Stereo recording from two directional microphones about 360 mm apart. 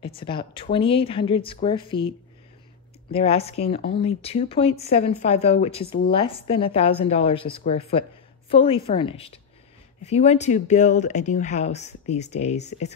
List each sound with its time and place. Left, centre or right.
0.0 s speech: centre